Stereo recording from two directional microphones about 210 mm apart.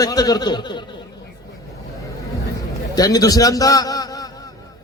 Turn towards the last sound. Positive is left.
turn(degrees=15)  # may be behind; listen again after turning